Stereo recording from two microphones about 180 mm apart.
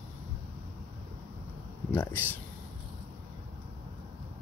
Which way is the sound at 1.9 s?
10° left (ahead or behind).